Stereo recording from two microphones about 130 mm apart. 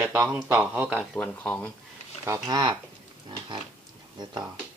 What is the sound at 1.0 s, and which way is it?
Speech, 5° left (ahead or behind).